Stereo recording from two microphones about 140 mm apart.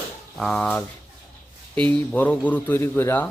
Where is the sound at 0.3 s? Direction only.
5° left (ahead or behind).